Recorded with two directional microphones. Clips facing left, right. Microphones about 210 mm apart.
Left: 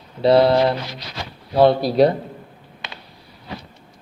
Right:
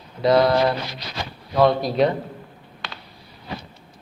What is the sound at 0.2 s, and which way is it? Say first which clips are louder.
Speech: left 3 dB; 30° left (ahead or behind).